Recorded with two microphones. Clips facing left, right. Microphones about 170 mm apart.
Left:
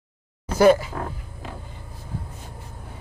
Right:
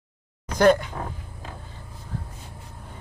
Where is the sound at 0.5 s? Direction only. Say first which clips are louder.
Left 2 dB; 5° left (ahead or behind).